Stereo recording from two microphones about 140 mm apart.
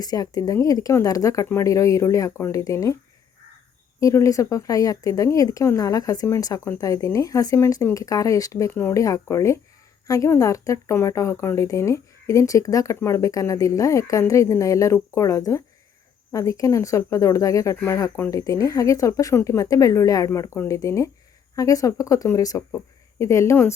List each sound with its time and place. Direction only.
0.0 s speech: 25° left (ahead or behind)
4.0 s speech: 20° left (ahead or behind)